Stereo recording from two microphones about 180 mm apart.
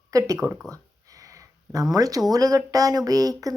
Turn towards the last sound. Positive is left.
turn(degrees=-20)  # may be behind; listen again after turning